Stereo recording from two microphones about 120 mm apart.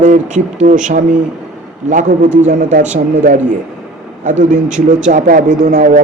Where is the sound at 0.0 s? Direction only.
90° right.